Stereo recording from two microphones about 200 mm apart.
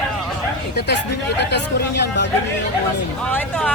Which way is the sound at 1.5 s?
55° left (ahead or behind).